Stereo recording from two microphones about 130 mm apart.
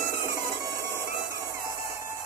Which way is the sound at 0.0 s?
20° right (ahead or behind).